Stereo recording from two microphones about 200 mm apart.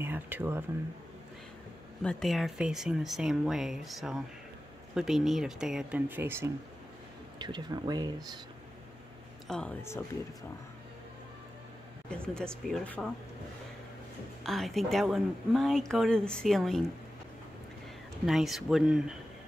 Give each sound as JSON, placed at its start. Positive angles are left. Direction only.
{"t": 0.0, "sound": "speech", "side_deg": -10}
{"t": 2.0, "sound": "speech", "side_deg": 0}
{"t": 7.3, "sound": "speech", "side_deg": -20}
{"t": 9.5, "sound": "speech", "side_deg": 5}
{"t": 12.1, "sound": "speech", "side_deg": 5}
{"t": 14.4, "sound": "speech", "side_deg": 0}
{"t": 18.2, "sound": "speech", "side_deg": 0}